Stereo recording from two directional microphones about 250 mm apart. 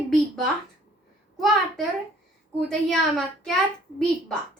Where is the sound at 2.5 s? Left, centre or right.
Centre.